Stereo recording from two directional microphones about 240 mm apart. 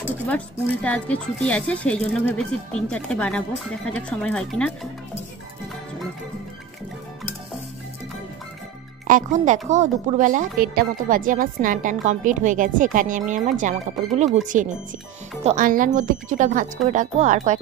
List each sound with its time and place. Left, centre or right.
0.8 s speech: centre
9.0 s a woman's voice: right